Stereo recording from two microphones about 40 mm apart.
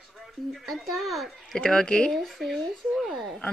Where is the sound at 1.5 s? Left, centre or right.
Centre.